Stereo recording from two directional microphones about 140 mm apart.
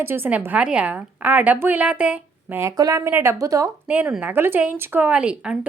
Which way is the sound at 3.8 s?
10° right (ahead or behind).